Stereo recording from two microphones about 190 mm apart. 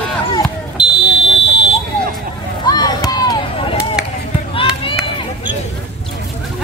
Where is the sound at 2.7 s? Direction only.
20° left (ahead or behind).